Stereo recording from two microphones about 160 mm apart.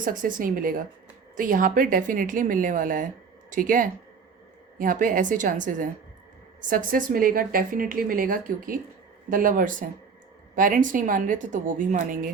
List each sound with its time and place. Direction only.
0.0 s a woman's voice: 60° right (ahead or behind)